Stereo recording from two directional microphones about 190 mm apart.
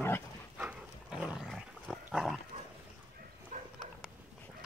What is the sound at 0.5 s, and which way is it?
Dog, 5° right (ahead or behind).